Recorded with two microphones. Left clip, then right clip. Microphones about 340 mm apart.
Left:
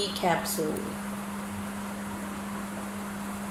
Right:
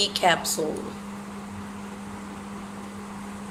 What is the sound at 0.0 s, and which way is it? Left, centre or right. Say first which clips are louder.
Speech: right 6 dB; right.